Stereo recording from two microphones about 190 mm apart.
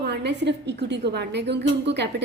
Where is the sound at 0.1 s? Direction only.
65° right (ahead or behind).